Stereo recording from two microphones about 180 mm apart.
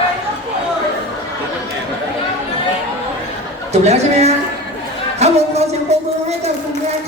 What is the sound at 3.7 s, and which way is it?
A woman's voice, 35° right (ahead or behind).